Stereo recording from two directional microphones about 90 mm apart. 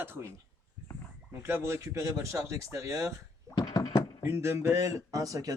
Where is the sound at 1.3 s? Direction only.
30° right (ahead or behind).